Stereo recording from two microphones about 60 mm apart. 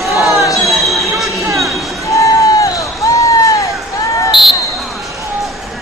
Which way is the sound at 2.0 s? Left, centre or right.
Left.